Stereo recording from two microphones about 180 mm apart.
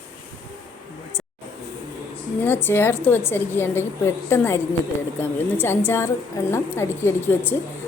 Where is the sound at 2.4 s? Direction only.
10° left (ahead or behind).